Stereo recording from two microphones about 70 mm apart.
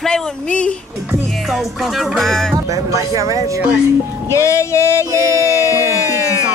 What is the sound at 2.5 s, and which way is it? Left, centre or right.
Speech, right.